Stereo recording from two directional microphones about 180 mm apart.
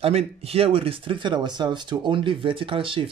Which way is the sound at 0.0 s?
35° right (ahead or behind).